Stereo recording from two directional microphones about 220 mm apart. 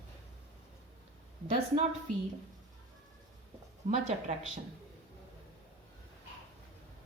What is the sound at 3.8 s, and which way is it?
Speech, 35° right (ahead or behind).